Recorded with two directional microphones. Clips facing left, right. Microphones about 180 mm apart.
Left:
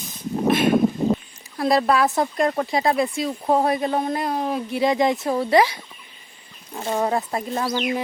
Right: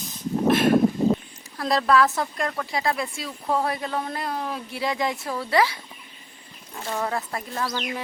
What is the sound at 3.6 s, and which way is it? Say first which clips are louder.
Speech: left 6 dB; 20° left (ahead or behind).